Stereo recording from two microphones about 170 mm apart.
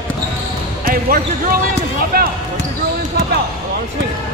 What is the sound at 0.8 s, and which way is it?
Speech, 55° right (ahead or behind).